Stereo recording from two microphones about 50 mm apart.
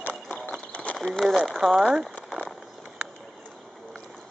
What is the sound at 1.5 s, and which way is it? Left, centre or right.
Speech, centre.